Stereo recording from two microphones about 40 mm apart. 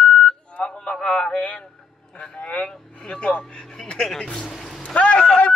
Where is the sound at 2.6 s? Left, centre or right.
Left.